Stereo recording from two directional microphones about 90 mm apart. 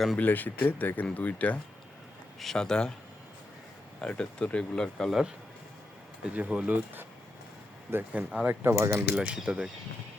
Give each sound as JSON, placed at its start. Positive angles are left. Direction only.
{"t": 0.2, "sound": "speech", "side_deg": 20}
{"t": 2.4, "sound": "speech", "side_deg": 5}
{"t": 4.0, "sound": "speech", "side_deg": 10}
{"t": 6.2, "sound": "speech", "side_deg": -15}
{"t": 9.1, "sound": "speech", "side_deg": -10}